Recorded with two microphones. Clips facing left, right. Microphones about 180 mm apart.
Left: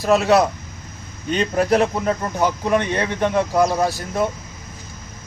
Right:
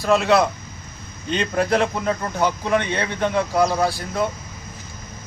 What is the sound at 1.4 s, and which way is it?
Speech, 10° left (ahead or behind).